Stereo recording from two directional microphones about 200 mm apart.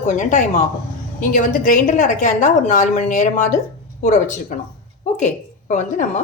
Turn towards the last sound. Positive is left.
turn(degrees=40)  # may be behind; listen again after turning